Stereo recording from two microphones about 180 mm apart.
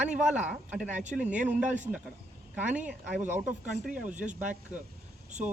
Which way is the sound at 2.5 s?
10° right (ahead or behind).